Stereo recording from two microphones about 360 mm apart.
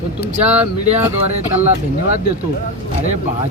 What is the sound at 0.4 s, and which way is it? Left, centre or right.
Speech, centre.